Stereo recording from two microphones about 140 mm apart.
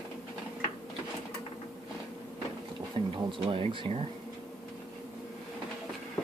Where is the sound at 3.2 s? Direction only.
40° right (ahead or behind).